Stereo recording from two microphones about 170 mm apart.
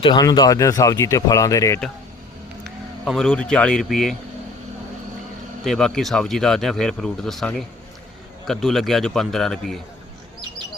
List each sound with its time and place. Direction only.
0.0 s speech: 25° left (ahead or behind)
2.6 s speech: centre (ahead or behind)
5.6 s speech: centre (ahead or behind)